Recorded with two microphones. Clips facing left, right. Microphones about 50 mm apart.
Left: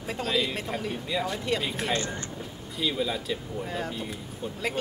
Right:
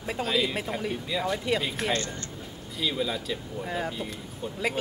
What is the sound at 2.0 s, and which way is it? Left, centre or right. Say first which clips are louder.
Speech: left 1 dB; centre.